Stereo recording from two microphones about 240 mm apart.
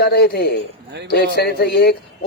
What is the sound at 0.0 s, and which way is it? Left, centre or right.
A man's voice, left.